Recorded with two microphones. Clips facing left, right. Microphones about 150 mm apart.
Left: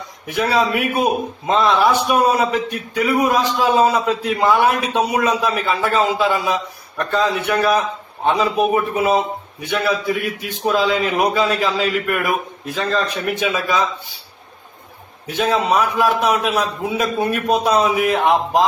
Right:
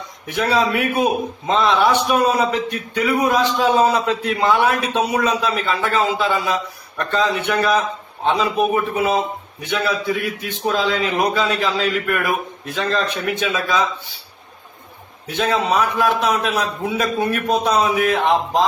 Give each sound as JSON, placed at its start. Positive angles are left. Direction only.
{"t": 0.3, "sound": "a man's voice", "side_deg": 10}
{"t": 15.3, "sound": "a man's voice", "side_deg": 5}